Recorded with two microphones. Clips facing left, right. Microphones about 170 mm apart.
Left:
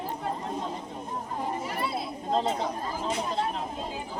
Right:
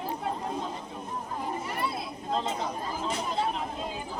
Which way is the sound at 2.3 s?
35° left (ahead or behind).